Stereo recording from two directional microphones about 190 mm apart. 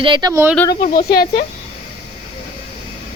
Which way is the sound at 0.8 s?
50° left (ahead or behind).